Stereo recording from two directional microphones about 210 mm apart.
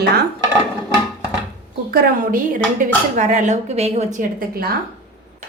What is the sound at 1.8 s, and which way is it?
Speech, 40° right (ahead or behind).